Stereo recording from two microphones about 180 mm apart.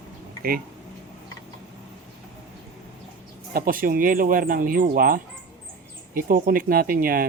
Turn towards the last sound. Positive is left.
turn(degrees=-55)  # may be behind; listen again after turning